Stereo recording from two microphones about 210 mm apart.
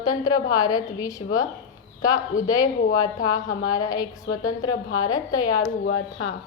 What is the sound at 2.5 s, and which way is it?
A woman's voice, 15° left (ahead or behind).